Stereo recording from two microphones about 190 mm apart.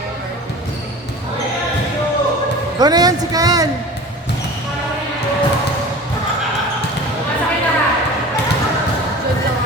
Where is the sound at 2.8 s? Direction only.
20° right (ahead or behind).